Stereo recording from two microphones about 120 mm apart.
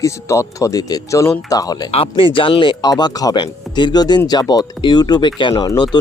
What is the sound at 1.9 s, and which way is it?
Speech, 50° left (ahead or behind).